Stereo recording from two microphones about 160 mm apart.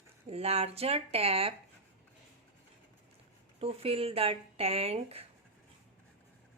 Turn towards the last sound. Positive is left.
turn(degrees=-40)  # may be behind; listen again after turning